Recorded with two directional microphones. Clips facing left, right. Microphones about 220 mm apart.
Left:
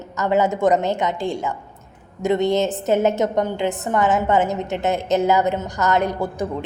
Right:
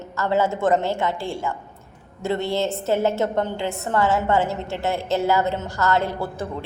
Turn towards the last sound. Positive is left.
turn(degrees=15)  # may be behind; listen again after turning